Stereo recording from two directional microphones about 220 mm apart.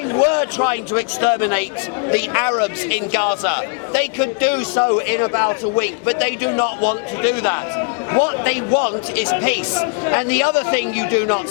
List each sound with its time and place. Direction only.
0.1 s a man's voice: 20° left (ahead or behind)